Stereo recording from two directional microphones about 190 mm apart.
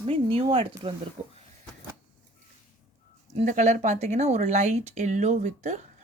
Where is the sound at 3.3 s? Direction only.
40° right (ahead or behind).